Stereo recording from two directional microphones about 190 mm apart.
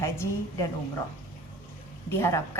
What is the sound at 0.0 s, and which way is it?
Speech, 15° left (ahead or behind).